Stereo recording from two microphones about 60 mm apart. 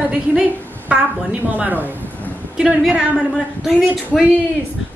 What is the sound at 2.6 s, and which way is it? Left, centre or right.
Speech, centre.